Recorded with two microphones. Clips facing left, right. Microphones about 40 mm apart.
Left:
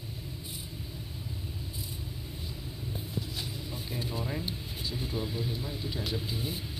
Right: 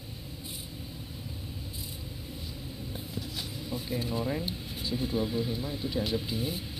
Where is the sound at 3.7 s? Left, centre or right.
Left.